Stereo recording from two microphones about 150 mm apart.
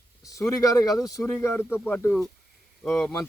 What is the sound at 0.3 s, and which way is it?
Speech, 20° left (ahead or behind).